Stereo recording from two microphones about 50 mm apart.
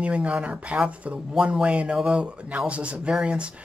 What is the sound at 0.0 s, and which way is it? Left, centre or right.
Speech, right.